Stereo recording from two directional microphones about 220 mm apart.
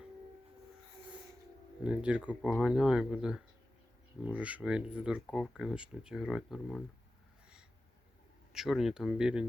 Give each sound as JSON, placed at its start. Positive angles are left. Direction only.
{"t": 1.8, "sound": "speech", "side_deg": -5}
{"t": 8.5, "sound": "speech", "side_deg": 0}